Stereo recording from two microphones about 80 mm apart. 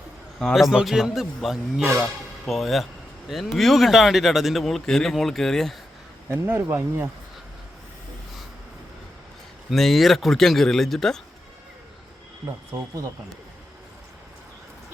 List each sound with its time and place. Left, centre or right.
0.3 s a man's voice: centre
6.3 s speech: right
9.6 s speech: centre